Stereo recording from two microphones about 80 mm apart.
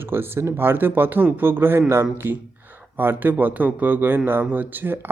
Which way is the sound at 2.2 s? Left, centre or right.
Right.